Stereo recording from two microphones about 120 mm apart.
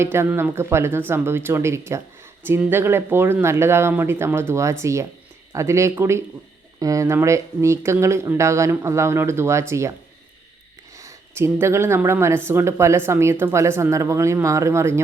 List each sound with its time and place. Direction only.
0.0 s speech: 20° right (ahead or behind)
10.9 s speech: 25° right (ahead or behind)